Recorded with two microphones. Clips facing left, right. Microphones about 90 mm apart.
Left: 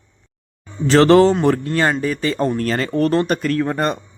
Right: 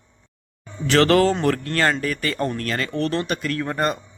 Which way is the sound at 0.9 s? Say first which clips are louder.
Left 5 dB; 25° left (ahead or behind).